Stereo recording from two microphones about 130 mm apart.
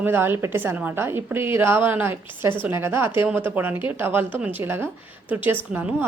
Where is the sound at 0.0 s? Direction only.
15° right (ahead or behind).